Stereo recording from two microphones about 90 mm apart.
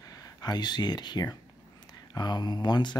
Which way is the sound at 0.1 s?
45° left (ahead or behind).